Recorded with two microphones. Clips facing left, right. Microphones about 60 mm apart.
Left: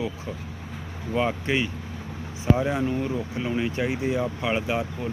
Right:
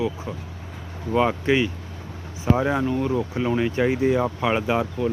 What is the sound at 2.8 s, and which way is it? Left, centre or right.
Speech, centre.